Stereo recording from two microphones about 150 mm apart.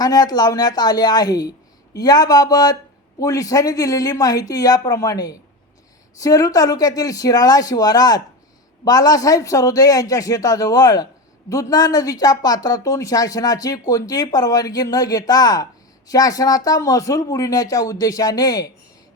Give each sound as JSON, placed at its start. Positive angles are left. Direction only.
{"t": 0.0, "sound": "a man's voice", "side_deg": 25}